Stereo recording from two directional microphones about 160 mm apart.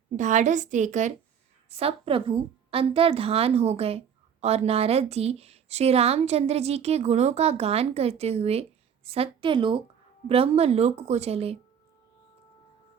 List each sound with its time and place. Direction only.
0.2 s a woman's voice: 50° right (ahead or behind)
1.7 s a woman's voice: 35° right (ahead or behind)